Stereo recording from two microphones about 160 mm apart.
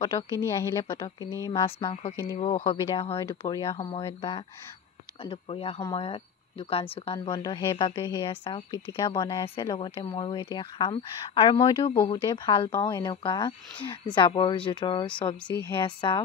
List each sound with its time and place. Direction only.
0.3 s a woman's voice: 15° left (ahead or behind)
2.3 s speech: 40° left (ahead or behind)
3.2 s a woman's voice: 20° left (ahead or behind)
7.2 s a woman's voice: 25° left (ahead or behind)
15.4 s a woman's voice: 10° left (ahead or behind)
15.7 s speech: 30° left (ahead or behind)